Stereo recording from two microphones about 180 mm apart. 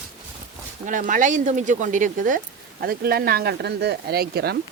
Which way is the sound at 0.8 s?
45° right (ahead or behind).